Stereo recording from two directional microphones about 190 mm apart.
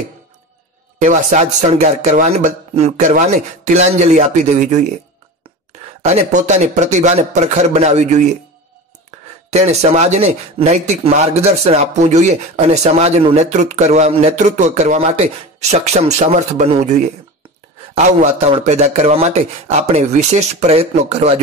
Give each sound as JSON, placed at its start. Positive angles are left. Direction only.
{"t": 1.0, "sound": "speech", "side_deg": -40}
{"t": 6.0, "sound": "speech", "side_deg": -40}
{"t": 9.5, "sound": "speech", "side_deg": -35}